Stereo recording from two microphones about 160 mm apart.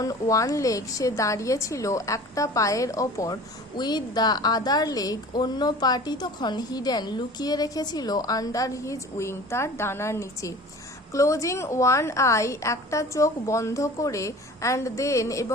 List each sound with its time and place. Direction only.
0.0 s a woman's voice: 20° left (ahead or behind)